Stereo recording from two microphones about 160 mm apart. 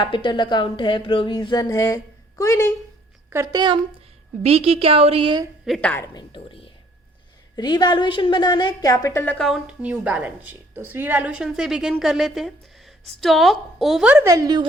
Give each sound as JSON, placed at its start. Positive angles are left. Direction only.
{"t": 0.0, "sound": "speech", "side_deg": 30}
{"t": 3.2, "sound": "speech", "side_deg": -20}
{"t": 4.4, "sound": "a woman's voice", "side_deg": -35}
{"t": 5.6, "sound": "a woman's voice", "side_deg": 5}
{"t": 6.1, "sound": "a woman's voice", "side_deg": 30}
{"t": 9.5, "sound": "a woman's voice", "side_deg": -5}
{"t": 14.3, "sound": "speech", "side_deg": -25}